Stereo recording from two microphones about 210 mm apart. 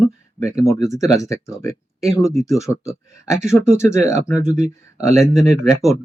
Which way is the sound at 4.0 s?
35° right (ahead or behind).